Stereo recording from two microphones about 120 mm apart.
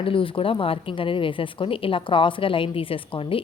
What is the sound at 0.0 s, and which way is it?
Speech, 50° left (ahead or behind).